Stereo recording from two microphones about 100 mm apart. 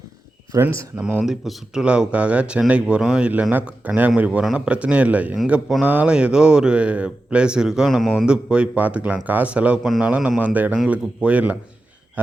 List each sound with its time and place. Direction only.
0.6 s speech: 25° right (ahead or behind)
1.2 s speech: 5° right (ahead or behind)